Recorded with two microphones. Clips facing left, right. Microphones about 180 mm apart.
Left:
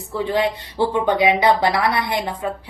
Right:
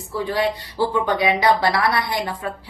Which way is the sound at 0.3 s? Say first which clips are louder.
Left 2 dB; 20° left (ahead or behind).